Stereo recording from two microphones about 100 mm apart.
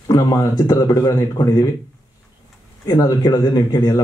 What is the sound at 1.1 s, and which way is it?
Speech, 30° left (ahead or behind).